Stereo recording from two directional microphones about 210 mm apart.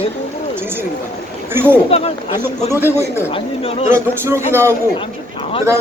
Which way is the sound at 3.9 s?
10° right (ahead or behind).